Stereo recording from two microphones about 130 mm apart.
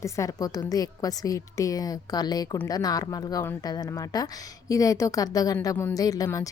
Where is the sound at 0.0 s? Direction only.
25° left (ahead or behind).